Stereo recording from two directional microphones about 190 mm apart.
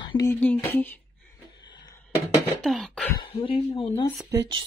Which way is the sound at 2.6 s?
Centre (ahead or behind).